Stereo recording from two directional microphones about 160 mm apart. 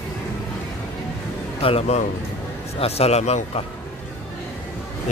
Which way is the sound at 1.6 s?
40° left (ahead or behind).